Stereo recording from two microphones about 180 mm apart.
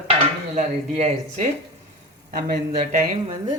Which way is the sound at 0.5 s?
40° right (ahead or behind).